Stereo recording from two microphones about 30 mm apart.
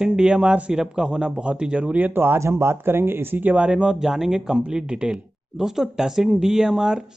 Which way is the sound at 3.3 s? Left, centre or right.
Right.